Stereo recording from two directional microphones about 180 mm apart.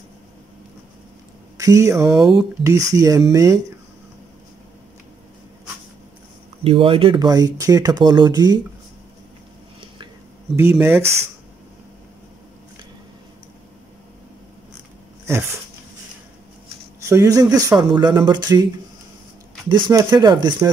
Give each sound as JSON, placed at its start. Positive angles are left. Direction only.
{"t": 1.6, "sound": "speech", "side_deg": -15}
{"t": 6.6, "sound": "speech", "side_deg": -30}
{"t": 10.5, "sound": "speech", "side_deg": -15}
{"t": 17.0, "sound": "speech", "side_deg": -20}
{"t": 19.9, "sound": "speech", "side_deg": -20}